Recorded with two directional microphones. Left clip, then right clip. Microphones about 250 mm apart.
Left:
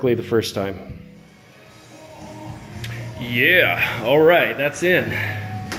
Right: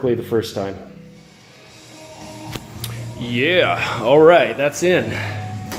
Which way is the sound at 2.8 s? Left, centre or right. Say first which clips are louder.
Left 2 dB; right.